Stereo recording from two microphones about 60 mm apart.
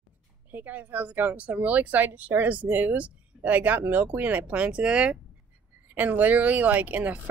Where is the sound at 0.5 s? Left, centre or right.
Right.